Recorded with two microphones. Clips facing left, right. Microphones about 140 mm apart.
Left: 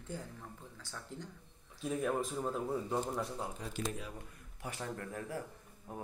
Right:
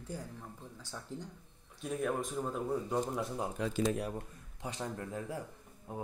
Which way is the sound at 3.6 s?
90° right.